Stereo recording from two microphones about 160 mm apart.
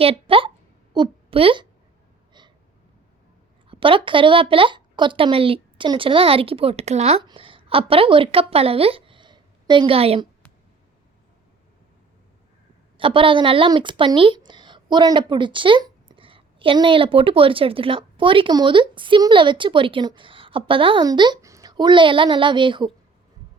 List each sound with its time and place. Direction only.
0.0 s a woman's voice: 35° right (ahead or behind)
3.7 s a woman's voice: 35° right (ahead or behind)
13.0 s a woman's voice: 35° right (ahead or behind)